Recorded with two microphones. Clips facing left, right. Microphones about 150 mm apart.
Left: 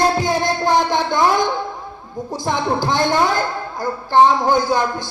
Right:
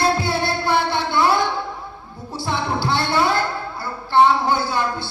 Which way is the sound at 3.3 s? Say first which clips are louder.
Left 2 dB; 40° left (ahead or behind).